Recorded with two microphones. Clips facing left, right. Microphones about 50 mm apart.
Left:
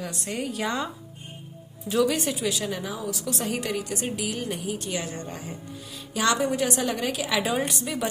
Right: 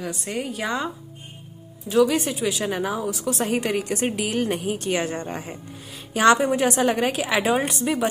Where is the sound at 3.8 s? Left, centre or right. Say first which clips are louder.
Right 5 dB; right.